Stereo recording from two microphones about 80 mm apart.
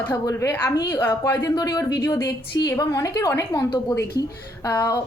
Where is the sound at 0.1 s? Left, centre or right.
Left.